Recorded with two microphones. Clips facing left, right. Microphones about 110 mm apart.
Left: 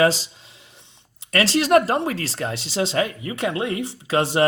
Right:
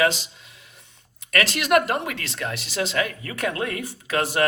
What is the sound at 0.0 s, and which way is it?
Speech, 35° left (ahead or behind).